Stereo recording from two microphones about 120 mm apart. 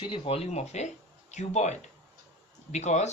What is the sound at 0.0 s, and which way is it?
Speech, 45° left (ahead or behind).